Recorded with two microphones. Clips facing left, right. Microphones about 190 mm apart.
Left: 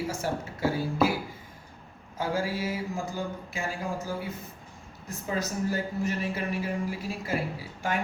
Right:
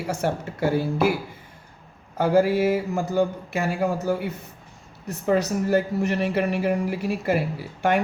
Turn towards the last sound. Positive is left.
turn(degrees=-65)  # may be behind; listen again after turning